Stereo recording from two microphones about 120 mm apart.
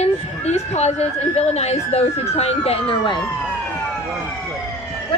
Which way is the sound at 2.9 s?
40° left (ahead or behind).